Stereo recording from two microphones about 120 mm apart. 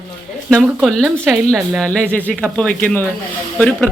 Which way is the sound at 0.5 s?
Centre (ahead or behind).